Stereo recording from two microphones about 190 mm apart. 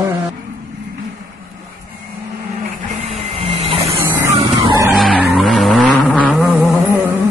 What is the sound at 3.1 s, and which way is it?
Printer, 30° right (ahead or behind).